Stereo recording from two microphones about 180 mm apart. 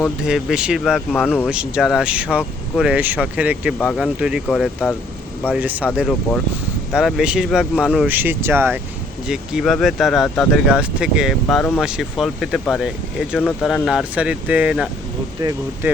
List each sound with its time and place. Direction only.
0.2 s speech: 5° right (ahead or behind)
5.5 s speech: 10° right (ahead or behind)
10.2 s speech: 10° left (ahead or behind)
10.5 s speech: 5° right (ahead or behind)